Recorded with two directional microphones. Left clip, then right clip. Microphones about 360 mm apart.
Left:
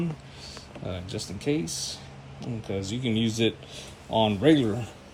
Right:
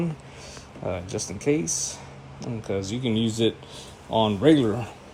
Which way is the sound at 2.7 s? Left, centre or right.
Centre.